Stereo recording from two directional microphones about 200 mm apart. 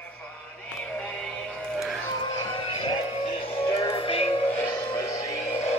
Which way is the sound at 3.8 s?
30° left (ahead or behind).